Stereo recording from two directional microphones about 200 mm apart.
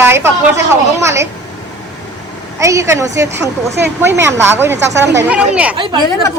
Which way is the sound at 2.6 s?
15° right (ahead or behind).